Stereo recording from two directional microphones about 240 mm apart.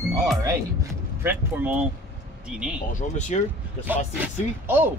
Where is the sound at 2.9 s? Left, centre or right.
Left.